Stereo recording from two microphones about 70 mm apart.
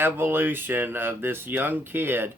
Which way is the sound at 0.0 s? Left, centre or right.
Right.